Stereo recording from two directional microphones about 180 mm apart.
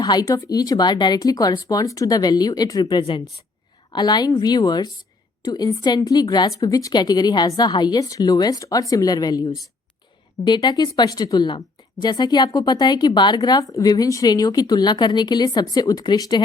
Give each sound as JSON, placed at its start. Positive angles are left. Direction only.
{"t": 0.0, "sound": "speech", "side_deg": 20}